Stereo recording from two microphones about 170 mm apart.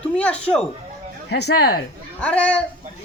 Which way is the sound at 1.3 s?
75° left (ahead or behind).